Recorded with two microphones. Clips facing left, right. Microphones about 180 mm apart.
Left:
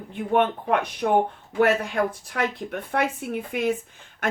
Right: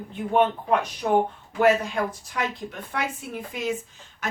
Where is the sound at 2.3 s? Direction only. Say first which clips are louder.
Left 3 dB; 55° left (ahead or behind).